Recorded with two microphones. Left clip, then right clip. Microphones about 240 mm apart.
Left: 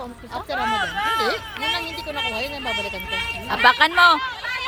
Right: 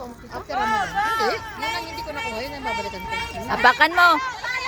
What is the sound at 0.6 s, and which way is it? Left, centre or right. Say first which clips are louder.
Speech: right 1 dB; centre.